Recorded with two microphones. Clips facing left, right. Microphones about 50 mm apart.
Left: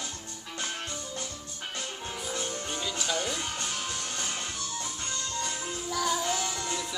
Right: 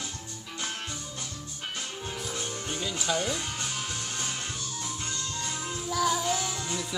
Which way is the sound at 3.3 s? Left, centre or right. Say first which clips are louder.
Right 1 dB; left.